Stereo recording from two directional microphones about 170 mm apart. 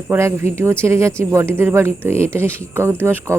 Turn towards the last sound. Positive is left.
turn(degrees=-15)  # may be behind; listen again after turning